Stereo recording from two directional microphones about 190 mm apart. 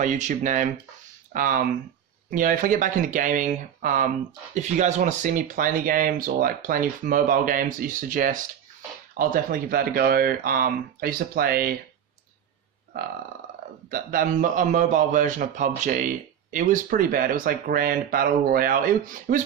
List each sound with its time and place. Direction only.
0.0 s a man's voice: 40° right (ahead or behind)
12.9 s a man's voice: 50° right (ahead or behind)